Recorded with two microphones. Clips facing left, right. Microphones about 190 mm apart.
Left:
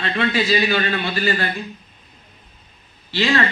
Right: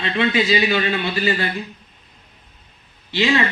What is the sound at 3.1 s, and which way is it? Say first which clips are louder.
Speech: right 1 dB; 15° right (ahead or behind).